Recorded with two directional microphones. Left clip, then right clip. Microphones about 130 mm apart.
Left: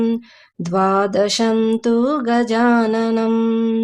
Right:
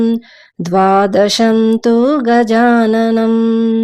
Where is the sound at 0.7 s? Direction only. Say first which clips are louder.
Right 6 dB; 50° right (ahead or behind).